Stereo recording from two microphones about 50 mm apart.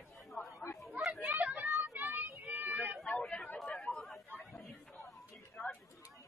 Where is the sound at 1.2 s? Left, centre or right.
Right.